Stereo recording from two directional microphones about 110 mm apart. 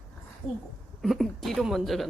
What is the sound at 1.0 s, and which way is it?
Speech, centre (ahead or behind).